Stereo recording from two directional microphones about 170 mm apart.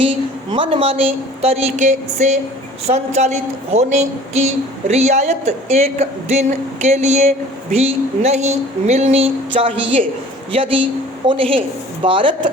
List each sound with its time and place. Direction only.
0.5 s a woman's voice: 30° right (ahead or behind)
1.4 s a sound: 40° right (ahead or behind)
2.8 s a woman's voice: 40° right (ahead or behind)